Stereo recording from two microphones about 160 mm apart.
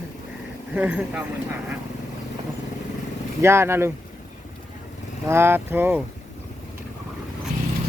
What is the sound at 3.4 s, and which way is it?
Speech, 15° right (ahead or behind).